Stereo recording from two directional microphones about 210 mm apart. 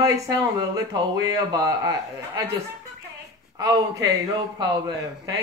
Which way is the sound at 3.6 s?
15° right (ahead or behind).